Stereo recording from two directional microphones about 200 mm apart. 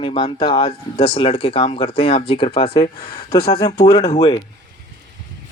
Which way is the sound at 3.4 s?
50° left (ahead or behind).